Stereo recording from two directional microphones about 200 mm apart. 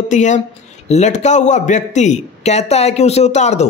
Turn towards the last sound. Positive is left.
turn(degrees=35)  # may be behind; listen again after turning